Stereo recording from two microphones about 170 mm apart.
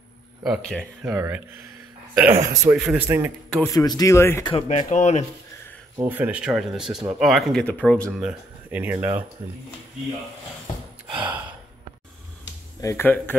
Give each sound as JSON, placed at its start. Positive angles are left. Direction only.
{"t": 0.4, "sound": "speech", "side_deg": 0}
{"t": 1.0, "sound": "a man's voice", "side_deg": -15}
{"t": 3.6, "sound": "speech", "side_deg": 20}
{"t": 4.6, "sound": "speech", "side_deg": 45}
{"t": 6.0, "sound": "speech", "side_deg": -10}
{"t": 11.2, "sound": "gasp", "side_deg": -10}
{"t": 12.8, "sound": "a man's voice", "side_deg": 15}